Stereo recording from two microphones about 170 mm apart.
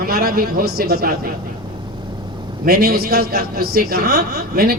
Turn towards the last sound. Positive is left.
turn(degrees=-60)  # may be behind; listen again after turning